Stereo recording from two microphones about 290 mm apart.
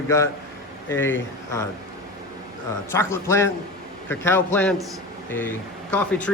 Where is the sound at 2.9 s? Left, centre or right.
Centre.